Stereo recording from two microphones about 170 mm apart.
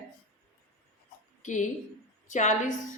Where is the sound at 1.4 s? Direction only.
45° left (ahead or behind).